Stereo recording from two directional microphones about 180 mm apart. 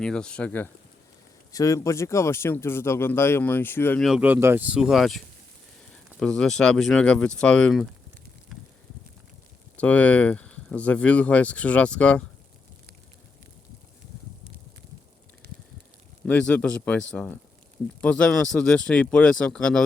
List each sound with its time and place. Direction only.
0.0 s speech: 5° left (ahead or behind)
4.0 s speech: 5° right (ahead or behind)
9.7 s speech: 10° left (ahead or behind)
15.4 s a sound: 65° right (ahead or behind)
16.2 s speech: 5° left (ahead or behind)